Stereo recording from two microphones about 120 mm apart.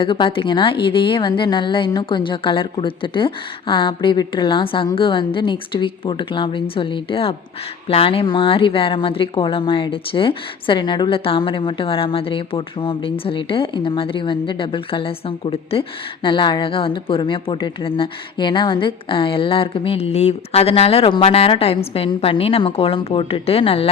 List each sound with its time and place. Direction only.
0.0 s speech: 45° left (ahead or behind)